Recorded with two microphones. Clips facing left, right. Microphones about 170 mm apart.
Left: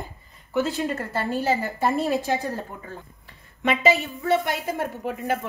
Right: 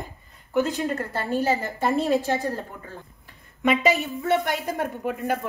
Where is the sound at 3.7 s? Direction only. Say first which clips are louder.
Left 1 dB; centre (ahead or behind).